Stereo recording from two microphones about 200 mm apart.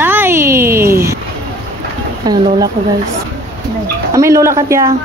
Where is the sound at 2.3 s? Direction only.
20° right (ahead or behind).